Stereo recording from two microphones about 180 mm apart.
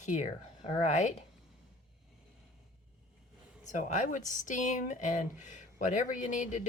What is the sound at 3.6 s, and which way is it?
A woman's voice, 45° left (ahead or behind).